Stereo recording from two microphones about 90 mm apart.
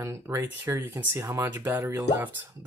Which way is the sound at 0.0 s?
30° right (ahead or behind).